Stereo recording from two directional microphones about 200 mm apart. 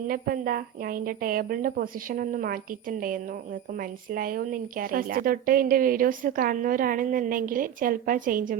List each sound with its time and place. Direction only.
0.1 s a woman's voice: 45° right (ahead or behind)